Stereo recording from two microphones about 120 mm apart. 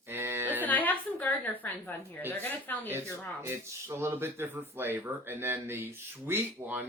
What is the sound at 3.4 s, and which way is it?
Speech, 20° right (ahead or behind).